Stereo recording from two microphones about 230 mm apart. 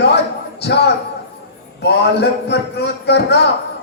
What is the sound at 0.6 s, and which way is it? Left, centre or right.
A man's voice, left.